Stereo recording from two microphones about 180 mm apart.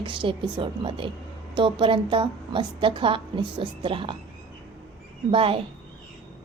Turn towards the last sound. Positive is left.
turn(degrees=-30)  # may be behind; listen again after turning